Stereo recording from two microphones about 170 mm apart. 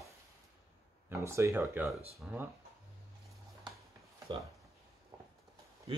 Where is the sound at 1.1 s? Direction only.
15° right (ahead or behind).